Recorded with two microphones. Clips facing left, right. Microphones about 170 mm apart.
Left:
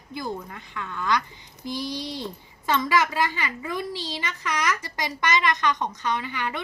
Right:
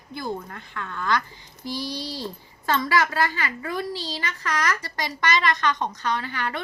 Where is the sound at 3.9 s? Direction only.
40° right (ahead or behind).